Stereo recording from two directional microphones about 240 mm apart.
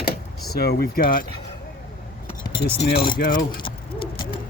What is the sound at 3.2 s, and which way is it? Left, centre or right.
Speech, left.